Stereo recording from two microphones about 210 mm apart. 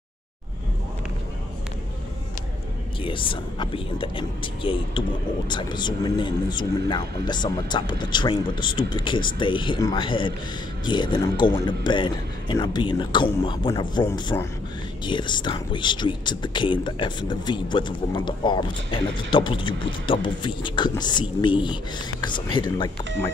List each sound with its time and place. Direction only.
3.0 s speech: 25° left (ahead or behind)